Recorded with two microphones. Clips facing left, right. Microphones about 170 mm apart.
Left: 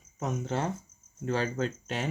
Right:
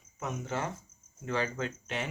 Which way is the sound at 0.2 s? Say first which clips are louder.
Left 4 dB; 35° left (ahead or behind).